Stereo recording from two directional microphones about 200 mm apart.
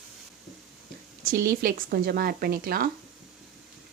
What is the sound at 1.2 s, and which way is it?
Speech, 45° right (ahead or behind).